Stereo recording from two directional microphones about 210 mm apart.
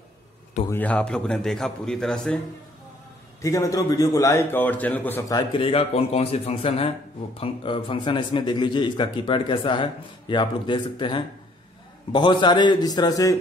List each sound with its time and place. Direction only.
0.7 s a man's voice: 10° left (ahead or behind)
3.4 s a man's voice: 15° left (ahead or behind)
5.5 s a man's voice: 25° left (ahead or behind)